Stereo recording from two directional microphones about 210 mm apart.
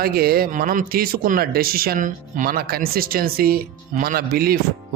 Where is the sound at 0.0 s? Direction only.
45° right (ahead or behind).